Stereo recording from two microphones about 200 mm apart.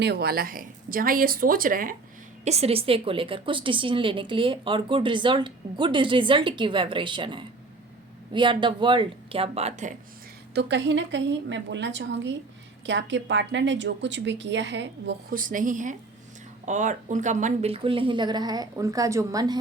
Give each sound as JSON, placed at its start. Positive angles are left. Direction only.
{"t": 0.0, "sound": "speech", "side_deg": -50}
{"t": 2.4, "sound": "a woman's voice", "side_deg": -30}
{"t": 10.5, "sound": "a woman's voice", "side_deg": -60}
{"t": 15.4, "sound": "a woman's voice", "side_deg": -40}